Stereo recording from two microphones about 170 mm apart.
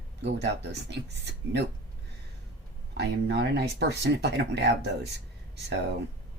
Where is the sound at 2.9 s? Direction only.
80° right.